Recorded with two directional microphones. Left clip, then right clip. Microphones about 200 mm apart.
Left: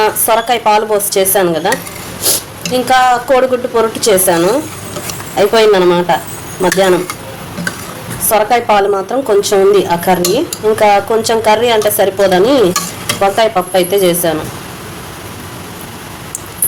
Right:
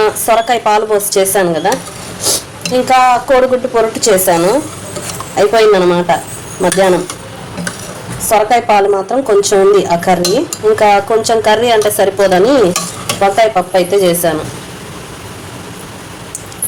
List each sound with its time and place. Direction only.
0.0 s a woman's voice: centre (ahead or behind)
8.3 s a woman's voice: centre (ahead or behind)